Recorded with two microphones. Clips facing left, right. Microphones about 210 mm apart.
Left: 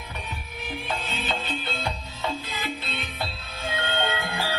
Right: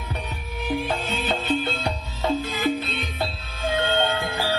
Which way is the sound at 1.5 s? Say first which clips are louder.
Right 7 dB; 45° right (ahead or behind).